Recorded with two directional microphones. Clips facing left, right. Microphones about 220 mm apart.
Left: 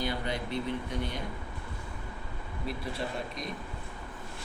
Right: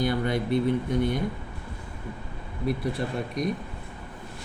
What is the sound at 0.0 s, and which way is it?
Speech, 50° right (ahead or behind).